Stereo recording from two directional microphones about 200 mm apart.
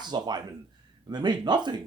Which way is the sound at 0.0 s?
20° right (ahead or behind).